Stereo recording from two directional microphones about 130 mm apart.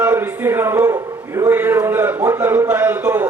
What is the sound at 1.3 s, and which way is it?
A man's voice, 20° right (ahead or behind).